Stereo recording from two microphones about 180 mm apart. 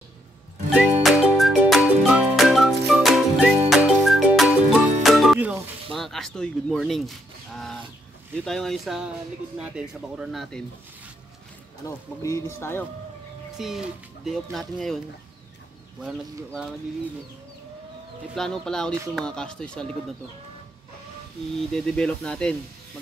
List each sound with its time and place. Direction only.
1.0 s music: centre (ahead or behind)
5.9 s speech: centre (ahead or behind)
11.8 s speech: 15° left (ahead or behind)
13.6 s speech: centre (ahead or behind)
16.0 s speech: 5° right (ahead or behind)
18.3 s speech: 5° left (ahead or behind)
21.5 s speech: 5° left (ahead or behind)